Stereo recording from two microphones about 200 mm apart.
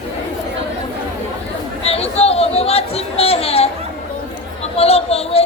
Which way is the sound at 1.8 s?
30° left (ahead or behind).